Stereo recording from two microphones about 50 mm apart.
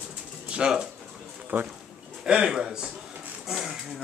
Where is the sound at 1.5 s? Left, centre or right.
Right.